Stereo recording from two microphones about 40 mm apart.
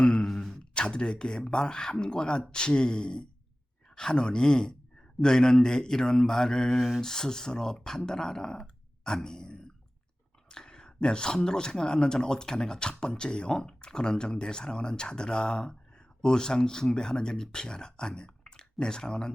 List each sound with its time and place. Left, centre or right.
0.0 s beatboxing: left
0.3 s a man's voice: centre